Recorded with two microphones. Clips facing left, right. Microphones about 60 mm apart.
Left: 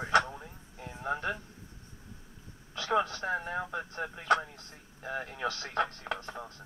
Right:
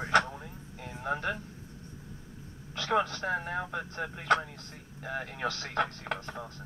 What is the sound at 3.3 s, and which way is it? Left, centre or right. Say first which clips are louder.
Speech: right 1 dB; right.